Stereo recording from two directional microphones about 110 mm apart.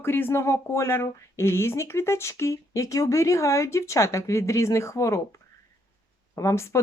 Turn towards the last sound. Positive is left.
turn(degrees=25)  # may be behind; listen again after turning